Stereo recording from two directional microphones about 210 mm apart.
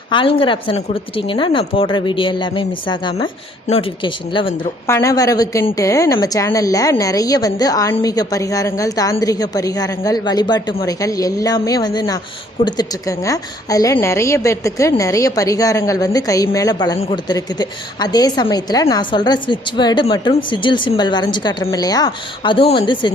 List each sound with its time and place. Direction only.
0.1 s a woman's voice: 25° left (ahead or behind)